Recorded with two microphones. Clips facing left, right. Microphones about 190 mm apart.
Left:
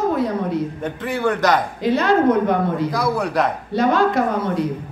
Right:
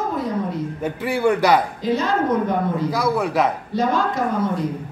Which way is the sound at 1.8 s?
70° left (ahead or behind).